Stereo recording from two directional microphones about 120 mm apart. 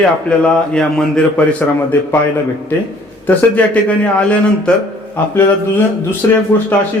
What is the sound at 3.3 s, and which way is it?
A man's voice, 10° left (ahead or behind).